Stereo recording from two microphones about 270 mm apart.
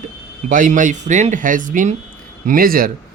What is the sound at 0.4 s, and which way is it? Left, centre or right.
Speech, right.